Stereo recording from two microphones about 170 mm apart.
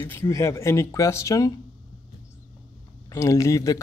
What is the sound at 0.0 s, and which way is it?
Speech, 15° left (ahead or behind).